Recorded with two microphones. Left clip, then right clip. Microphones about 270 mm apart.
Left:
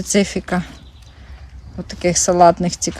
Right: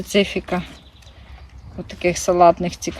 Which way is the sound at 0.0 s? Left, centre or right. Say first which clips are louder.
Left 1 dB; centre.